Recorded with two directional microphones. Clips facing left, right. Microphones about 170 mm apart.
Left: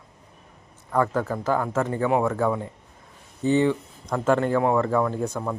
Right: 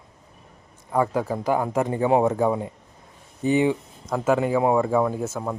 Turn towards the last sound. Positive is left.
turn(degrees=-5)  # may be behind; listen again after turning